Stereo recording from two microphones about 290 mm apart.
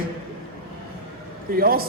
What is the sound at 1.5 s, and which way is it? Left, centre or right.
Speech, right.